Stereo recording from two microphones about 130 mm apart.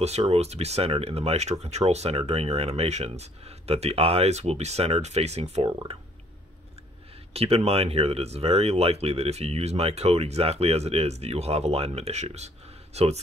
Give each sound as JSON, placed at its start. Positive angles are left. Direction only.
{"t": 0.0, "sound": "speech", "side_deg": -55}
{"t": 5.7, "sound": "speech", "side_deg": -35}
{"t": 7.3, "sound": "speech", "side_deg": -50}